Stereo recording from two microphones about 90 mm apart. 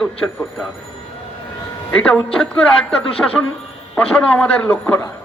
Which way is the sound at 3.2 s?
20° left (ahead or behind).